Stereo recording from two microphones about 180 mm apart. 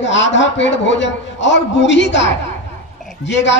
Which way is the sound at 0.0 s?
90° left.